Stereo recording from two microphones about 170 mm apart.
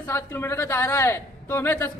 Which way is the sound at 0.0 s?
15° left (ahead or behind).